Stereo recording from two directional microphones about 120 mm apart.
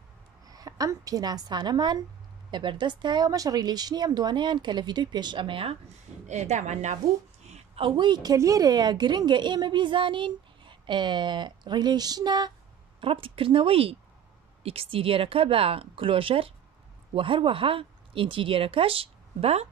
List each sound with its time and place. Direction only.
0.5 s a woman's voice: 30° right (ahead or behind); by 5.8 s 50° right (ahead or behind)
6.2 s a woman's voice: 75° right (ahead or behind)
7.4 s a woman's voice: 60° right (ahead or behind); by 12.5 s 35° right (ahead or behind)
13.0 s speech: 45° right (ahead or behind)